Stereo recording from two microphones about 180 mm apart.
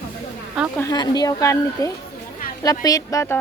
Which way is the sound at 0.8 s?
20° left (ahead or behind).